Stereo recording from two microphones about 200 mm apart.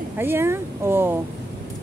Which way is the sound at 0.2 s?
10° right (ahead or behind).